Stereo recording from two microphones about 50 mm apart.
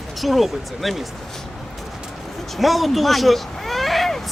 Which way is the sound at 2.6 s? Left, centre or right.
Centre.